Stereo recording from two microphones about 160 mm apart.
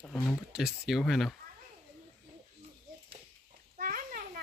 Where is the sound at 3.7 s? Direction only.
65° right (ahead or behind).